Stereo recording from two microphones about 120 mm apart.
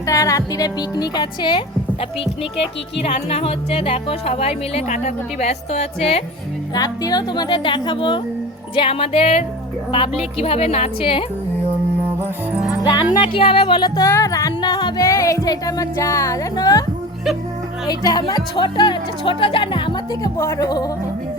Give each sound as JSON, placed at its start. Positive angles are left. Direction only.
{"t": 0.0, "sound": "speech", "side_deg": 30}
{"t": 3.0, "sound": "speech", "side_deg": 55}
{"t": 4.9, "sound": "speech", "side_deg": 75}
{"t": 6.7, "sound": "speech", "side_deg": 30}
{"t": 12.8, "sound": "speech", "side_deg": 35}
{"t": 14.1, "sound": "music", "side_deg": 25}
{"t": 17.8, "sound": "speech", "side_deg": 35}
{"t": 20.4, "sound": "speech", "side_deg": 30}